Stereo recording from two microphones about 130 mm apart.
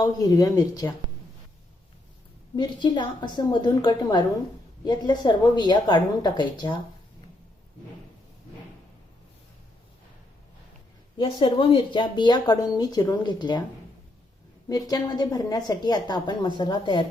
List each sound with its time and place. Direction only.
0.0 s speech: 30° left (ahead or behind)
2.6 s speech: 35° left (ahead or behind)
11.2 s speech: 40° left (ahead or behind)
14.7 s speech: 30° left (ahead or behind)